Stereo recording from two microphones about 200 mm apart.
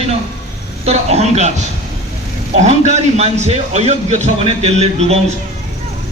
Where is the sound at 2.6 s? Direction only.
35° right (ahead or behind).